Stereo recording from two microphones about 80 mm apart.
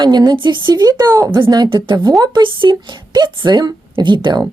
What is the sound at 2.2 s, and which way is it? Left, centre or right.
Speech, right.